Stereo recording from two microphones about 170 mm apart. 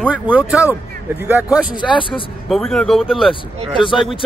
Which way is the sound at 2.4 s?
Centre (ahead or behind).